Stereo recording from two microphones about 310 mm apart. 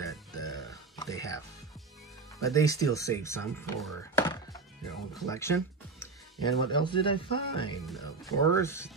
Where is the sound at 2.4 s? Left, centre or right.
Centre.